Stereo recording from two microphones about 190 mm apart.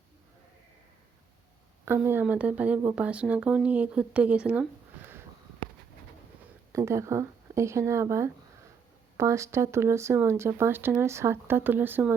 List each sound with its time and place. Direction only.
1.8 s speech: 10° right (ahead or behind)
6.7 s speech: 15° right (ahead or behind)